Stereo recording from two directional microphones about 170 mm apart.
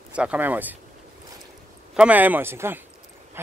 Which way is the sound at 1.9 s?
10° right (ahead or behind).